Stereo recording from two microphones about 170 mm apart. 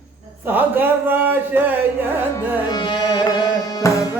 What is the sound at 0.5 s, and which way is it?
Speech, 10° right (ahead or behind).